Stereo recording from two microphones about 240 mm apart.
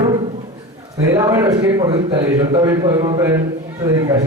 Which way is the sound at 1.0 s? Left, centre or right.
Centre.